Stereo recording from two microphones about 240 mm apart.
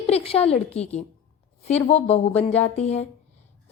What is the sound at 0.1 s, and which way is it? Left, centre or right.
A woman's voice, left.